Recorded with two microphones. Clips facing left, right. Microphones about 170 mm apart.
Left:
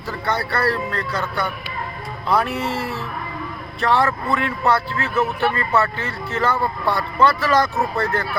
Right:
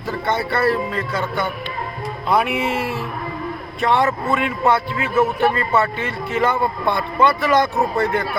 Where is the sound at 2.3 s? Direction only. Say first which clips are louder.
Right 2 dB; 10° right (ahead or behind).